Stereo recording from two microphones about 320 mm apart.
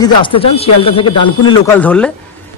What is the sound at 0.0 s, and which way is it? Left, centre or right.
A man's voice, centre.